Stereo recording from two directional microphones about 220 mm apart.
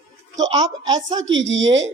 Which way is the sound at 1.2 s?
55° right (ahead or behind).